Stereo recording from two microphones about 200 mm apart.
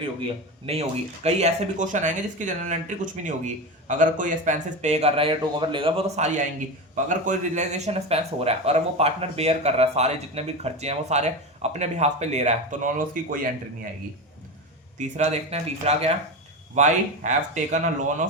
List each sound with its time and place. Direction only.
0.6 s speech: 30° right (ahead or behind)
14.9 s speech: 35° right (ahead or behind)